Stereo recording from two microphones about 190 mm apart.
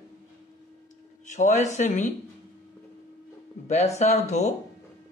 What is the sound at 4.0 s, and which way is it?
Speech, 35° left (ahead or behind).